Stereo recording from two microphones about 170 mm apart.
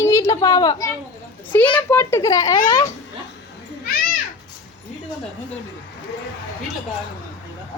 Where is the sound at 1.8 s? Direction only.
10° left (ahead or behind).